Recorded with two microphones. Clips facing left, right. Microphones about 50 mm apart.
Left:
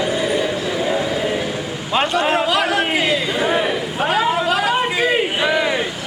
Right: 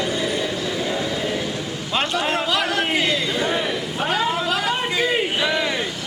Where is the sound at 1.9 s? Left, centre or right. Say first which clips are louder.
Left 5 dB; centre.